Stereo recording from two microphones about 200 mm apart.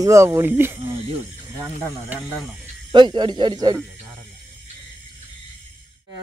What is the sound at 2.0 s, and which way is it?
Speech, centre (ahead or behind).